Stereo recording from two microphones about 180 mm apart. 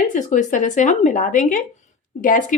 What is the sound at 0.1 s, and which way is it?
Speech, 45° left (ahead or behind).